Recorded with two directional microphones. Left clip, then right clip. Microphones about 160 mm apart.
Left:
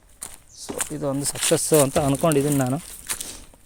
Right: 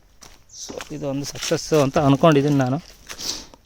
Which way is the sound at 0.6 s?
90° left.